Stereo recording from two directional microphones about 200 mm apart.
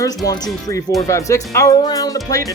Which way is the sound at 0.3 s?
20° left (ahead or behind).